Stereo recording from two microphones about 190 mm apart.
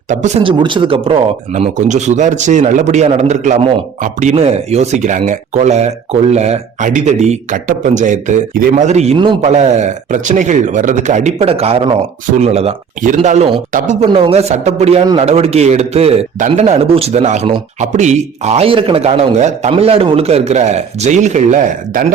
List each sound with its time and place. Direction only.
0.1 s speech: 40° right (ahead or behind)
0.6 s speech: 25° right (ahead or behind); by 22.0 s 40° right (ahead or behind)